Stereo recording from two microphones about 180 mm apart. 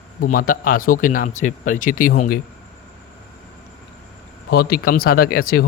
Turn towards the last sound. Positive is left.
turn(degrees=55)  # may be behind; listen again after turning